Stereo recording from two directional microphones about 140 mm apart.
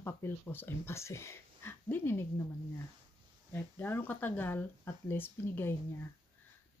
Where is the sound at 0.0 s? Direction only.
15° left (ahead or behind).